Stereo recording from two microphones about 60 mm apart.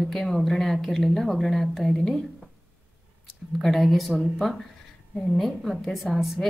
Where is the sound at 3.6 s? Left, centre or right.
Centre.